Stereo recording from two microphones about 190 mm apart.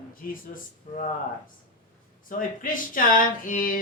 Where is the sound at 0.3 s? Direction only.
45° left (ahead or behind).